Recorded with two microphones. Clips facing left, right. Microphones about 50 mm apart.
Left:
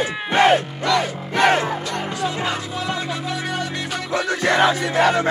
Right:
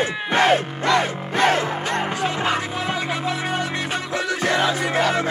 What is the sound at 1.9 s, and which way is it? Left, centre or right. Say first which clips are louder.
Music: right 1 dB; right.